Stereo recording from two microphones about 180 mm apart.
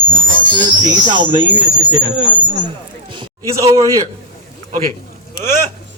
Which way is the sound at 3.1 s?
20° right (ahead or behind).